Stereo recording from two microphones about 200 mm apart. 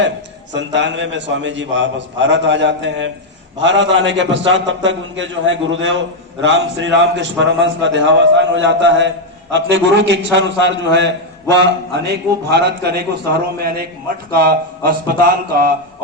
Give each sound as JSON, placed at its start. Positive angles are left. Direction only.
{"t": 0.5, "sound": "a man's voice", "side_deg": -65}